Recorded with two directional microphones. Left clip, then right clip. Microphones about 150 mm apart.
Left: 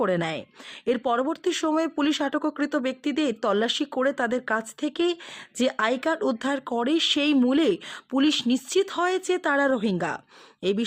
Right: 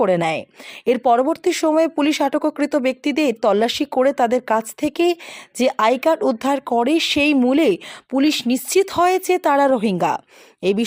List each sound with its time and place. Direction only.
0.0 s speech: 25° right (ahead or behind)